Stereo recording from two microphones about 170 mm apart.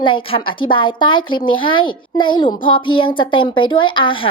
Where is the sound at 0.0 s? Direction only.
30° left (ahead or behind).